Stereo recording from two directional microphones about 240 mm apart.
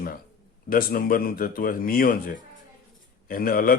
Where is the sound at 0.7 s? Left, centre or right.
Left.